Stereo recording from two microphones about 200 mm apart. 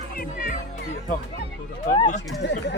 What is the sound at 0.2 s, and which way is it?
Speech, 45° left (ahead or behind).